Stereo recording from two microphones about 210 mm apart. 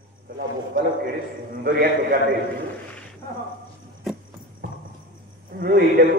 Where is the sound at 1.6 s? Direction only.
45° right (ahead or behind).